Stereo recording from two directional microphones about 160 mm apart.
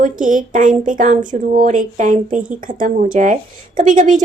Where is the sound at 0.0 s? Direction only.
55° right (ahead or behind).